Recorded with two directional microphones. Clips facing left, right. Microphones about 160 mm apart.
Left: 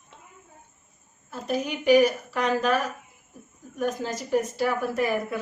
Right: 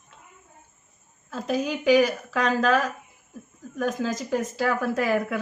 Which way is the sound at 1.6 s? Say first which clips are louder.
Left 1 dB; 90° right.